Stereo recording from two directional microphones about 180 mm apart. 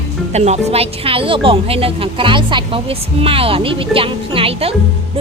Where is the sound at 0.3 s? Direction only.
40° right (ahead or behind).